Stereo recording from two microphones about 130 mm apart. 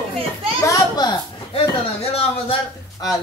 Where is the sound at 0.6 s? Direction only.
30° left (ahead or behind).